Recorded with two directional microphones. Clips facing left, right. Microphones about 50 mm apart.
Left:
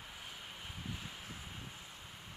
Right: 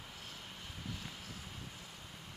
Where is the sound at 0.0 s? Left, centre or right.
Centre.